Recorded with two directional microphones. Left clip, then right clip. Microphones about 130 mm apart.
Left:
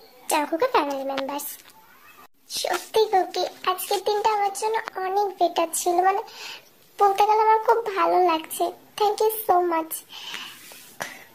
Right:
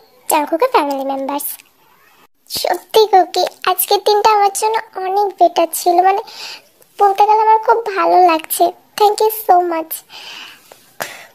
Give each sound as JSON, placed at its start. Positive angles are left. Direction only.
{"t": 0.3, "sound": "a child's voice", "side_deg": -40}
{"t": 2.4, "sound": "a child's voice", "side_deg": -55}